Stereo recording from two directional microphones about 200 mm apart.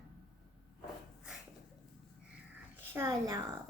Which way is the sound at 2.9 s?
15° right (ahead or behind).